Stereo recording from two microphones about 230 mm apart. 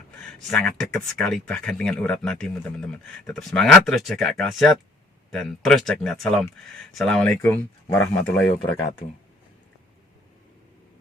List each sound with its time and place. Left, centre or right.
0.2 s speech: centre
8.6 s speech: centre